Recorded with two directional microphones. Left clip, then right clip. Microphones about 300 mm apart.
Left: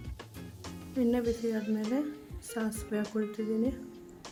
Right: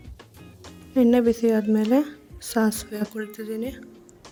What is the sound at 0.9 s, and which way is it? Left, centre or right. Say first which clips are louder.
Speech: right 11 dB; right.